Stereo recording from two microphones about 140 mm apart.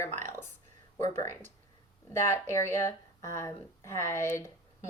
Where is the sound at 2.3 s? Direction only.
20° left (ahead or behind).